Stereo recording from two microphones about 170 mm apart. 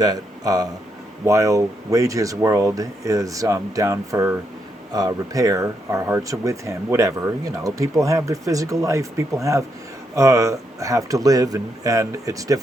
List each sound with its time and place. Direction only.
0.0 s speech: 20° right (ahead or behind)